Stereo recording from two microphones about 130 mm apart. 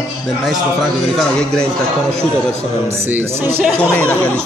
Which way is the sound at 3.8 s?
10° left (ahead or behind).